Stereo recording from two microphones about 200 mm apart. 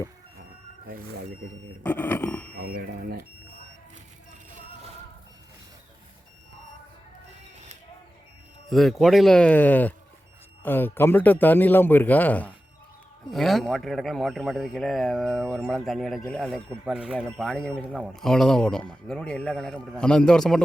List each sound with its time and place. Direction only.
1.8 s a man's voice: 10° left (ahead or behind)
2.6 s speech: 45° right (ahead or behind)
8.7 s a man's voice: centre (ahead or behind)